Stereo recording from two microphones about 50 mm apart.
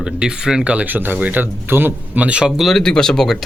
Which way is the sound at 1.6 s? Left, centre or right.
Right.